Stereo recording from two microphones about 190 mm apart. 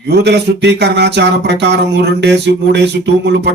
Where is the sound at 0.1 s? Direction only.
60° right (ahead or behind).